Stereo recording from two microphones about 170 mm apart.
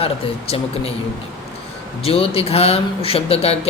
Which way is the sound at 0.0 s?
35° left (ahead or behind).